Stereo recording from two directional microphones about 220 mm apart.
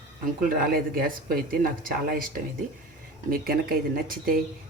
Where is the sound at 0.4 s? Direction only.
40° right (ahead or behind).